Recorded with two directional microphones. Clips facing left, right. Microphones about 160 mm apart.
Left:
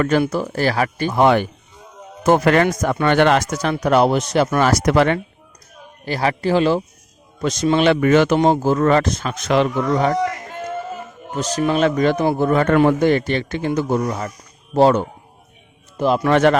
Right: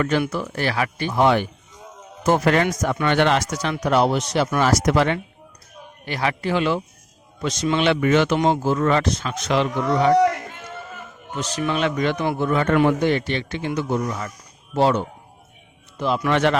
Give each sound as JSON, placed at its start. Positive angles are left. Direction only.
{"t": 0.0, "sound": "speech", "side_deg": 40}
{"t": 6.1, "sound": "speech", "side_deg": 35}
{"t": 11.3, "sound": "speech", "side_deg": 40}